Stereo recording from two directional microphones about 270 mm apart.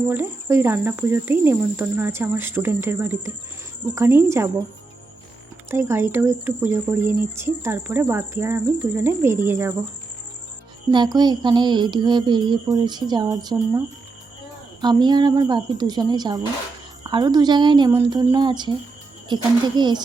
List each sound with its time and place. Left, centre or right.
0.1 s speech: centre
5.7 s speech: centre
10.9 s speech: centre